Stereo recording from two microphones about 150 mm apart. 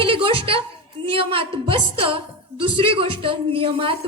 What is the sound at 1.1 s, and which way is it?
A woman's voice, 40° right (ahead or behind).